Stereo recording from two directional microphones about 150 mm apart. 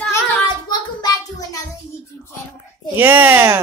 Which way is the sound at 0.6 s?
25° left (ahead or behind).